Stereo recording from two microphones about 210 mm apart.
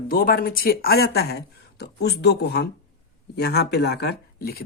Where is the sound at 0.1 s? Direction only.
45° left (ahead or behind).